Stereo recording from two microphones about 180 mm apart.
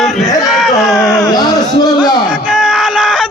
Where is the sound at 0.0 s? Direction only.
Centre (ahead or behind).